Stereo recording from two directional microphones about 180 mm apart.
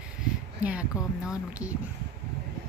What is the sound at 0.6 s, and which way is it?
Speech, 5° right (ahead or behind).